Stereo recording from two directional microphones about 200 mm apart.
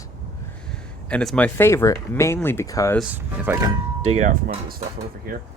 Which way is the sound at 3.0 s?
10° right (ahead or behind).